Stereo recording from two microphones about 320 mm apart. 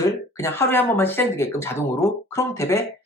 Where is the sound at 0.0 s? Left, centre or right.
Centre.